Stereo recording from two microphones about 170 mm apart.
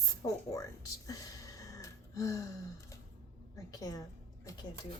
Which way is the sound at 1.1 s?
20° left (ahead or behind).